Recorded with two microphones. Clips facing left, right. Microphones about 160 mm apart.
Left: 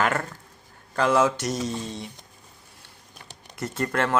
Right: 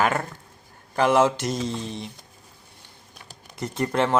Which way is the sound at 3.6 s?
15° right (ahead or behind).